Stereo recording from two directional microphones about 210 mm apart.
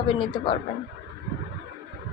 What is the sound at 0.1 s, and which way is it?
Speech, 20° left (ahead or behind).